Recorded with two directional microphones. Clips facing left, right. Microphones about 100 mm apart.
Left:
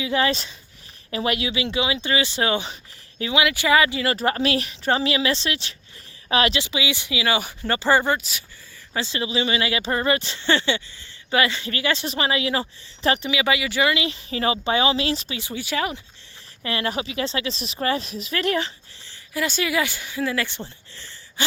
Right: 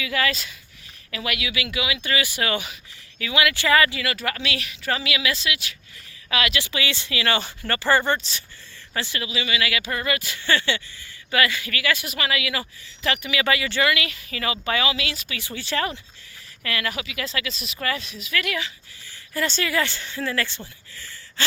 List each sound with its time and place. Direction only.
0.0 s speech: 30° left (ahead or behind)
4.0 s speech: 35° left (ahead or behind)
6.6 s speech: 15° left (ahead or behind)
8.9 s speech: 20° left (ahead or behind)
13.4 s speech: 15° left (ahead or behind); by 15.4 s 35° left (ahead or behind)
15.4 s speech: 20° left (ahead or behind)
16.6 s speech: 30° left (ahead or behind)
19.3 s speech: 5° left (ahead or behind)
20.6 s a sound: 25° left (ahead or behind)